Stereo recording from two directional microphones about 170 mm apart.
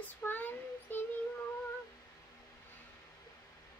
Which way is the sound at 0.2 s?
10° left (ahead or behind).